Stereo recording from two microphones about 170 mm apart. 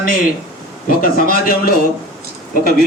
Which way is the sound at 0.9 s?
55° left (ahead or behind).